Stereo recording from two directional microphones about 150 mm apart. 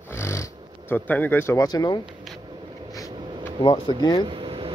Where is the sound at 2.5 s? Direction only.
30° right (ahead or behind).